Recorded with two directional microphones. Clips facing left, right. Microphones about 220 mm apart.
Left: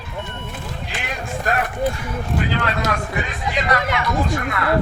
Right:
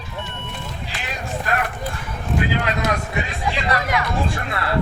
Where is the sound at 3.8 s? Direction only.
25° left (ahead or behind).